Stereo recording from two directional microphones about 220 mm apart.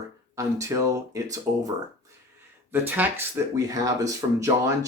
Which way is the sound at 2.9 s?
10° right (ahead or behind).